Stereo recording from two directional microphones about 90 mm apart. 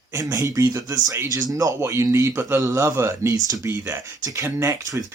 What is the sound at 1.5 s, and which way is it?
Speech, 40° right (ahead or behind).